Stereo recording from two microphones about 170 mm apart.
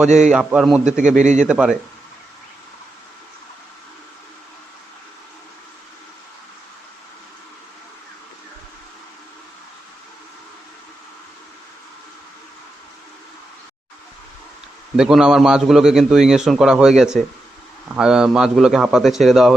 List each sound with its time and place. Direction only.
0.3 s a man's voice: 5° right (ahead or behind)
1.2 s a man's voice: 45° right (ahead or behind)
1.5 s a man's voice: 5° right (ahead or behind)
14.9 s a man's voice: 5° right (ahead or behind)